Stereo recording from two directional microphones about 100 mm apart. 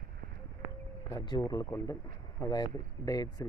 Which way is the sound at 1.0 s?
45° left (ahead or behind).